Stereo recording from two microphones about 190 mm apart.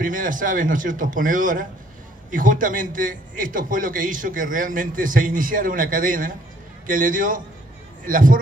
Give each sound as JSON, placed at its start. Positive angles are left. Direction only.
{"t": 0.0, "sound": "a man's voice", "side_deg": -45}